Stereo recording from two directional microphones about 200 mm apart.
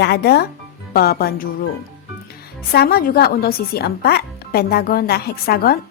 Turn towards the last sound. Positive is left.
turn(degrees=50)  # may be behind; listen again after turning